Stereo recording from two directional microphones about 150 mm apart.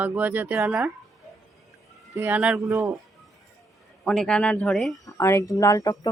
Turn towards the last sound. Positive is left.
turn(degrees=25)  # may be behind; listen again after turning